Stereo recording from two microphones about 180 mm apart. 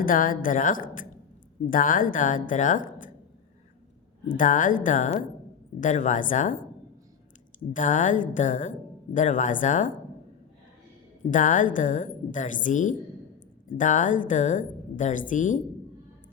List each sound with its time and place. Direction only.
0.0 s a woman's voice: 50° left (ahead or behind)
4.3 s a woman's voice: 45° left (ahead or behind)
7.7 s a woman's voice: 45° left (ahead or behind)
11.3 s a woman's voice: 45° left (ahead or behind)